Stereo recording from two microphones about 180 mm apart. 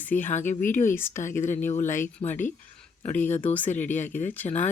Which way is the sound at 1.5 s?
10° left (ahead or behind).